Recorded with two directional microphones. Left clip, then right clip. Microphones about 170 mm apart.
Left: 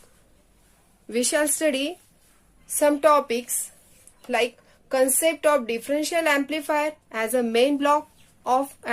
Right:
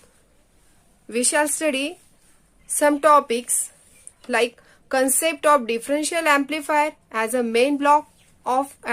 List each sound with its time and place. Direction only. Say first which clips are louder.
1.0 s a woman's voice: right 2 dB; 10° right (ahead or behind)
2.6 s a woman's voice: right 2 dB; 25° right (ahead or behind)